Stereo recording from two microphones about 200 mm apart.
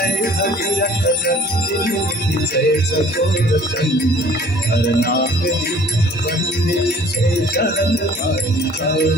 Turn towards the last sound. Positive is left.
turn(degrees=55)  # may be behind; listen again after turning